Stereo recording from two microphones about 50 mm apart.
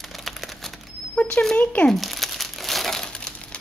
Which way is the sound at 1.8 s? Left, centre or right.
Centre.